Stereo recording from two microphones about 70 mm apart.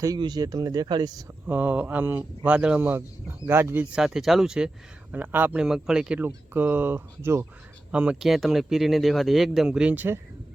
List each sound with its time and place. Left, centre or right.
0.0 s speech: right
1.5 s speech: right
2.6 s speech: centre
2.8 s speech: right
3.9 s speech: centre
5.1 s speech: right
5.5 s speech: centre
6.1 s speech: right
7.9 s speech: centre
8.2 s speech: centre
9.9 s speech: right